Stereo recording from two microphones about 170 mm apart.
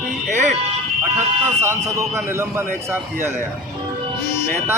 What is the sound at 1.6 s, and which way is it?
A man's voice, 15° right (ahead or behind).